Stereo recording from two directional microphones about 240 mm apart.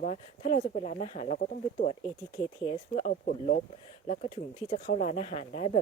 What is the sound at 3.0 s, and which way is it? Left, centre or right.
Speech, left.